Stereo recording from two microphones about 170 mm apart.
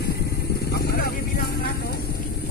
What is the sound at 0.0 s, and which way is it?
Vehicle, 70° left (ahead or behind).